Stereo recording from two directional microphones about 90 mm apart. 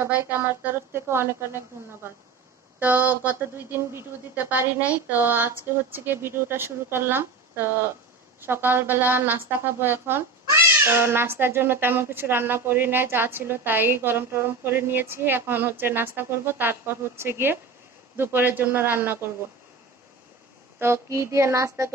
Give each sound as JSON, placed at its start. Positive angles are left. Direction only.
{"t": 0.0, "sound": "a woman's voice", "side_deg": -25}
{"t": 2.8, "sound": "a woman's voice", "side_deg": -20}
{"t": 20.8, "sound": "music", "side_deg": -30}